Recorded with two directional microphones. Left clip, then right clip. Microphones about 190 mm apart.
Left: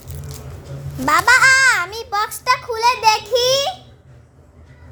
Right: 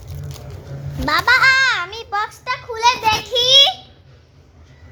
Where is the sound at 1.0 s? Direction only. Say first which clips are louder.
Left 1 dB; 15° left (ahead or behind).